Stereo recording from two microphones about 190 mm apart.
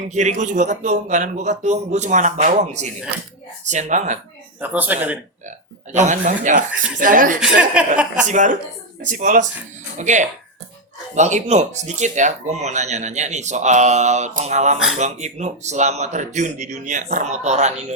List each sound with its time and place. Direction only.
0.1 s speech: 40° right (ahead or behind)
4.6 s speech: 10° right (ahead or behind)
5.5 s speech: 40° right (ahead or behind)
7.3 s speech: 5° right (ahead or behind)
8.3 s speech: 40° right (ahead or behind)